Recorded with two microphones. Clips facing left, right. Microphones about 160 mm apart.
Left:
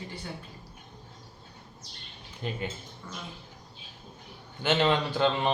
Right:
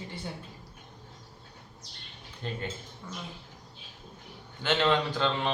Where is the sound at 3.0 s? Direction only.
10° right (ahead or behind).